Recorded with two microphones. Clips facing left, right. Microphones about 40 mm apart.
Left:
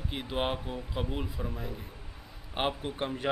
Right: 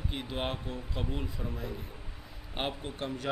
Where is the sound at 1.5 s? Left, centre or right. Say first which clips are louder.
Even; centre.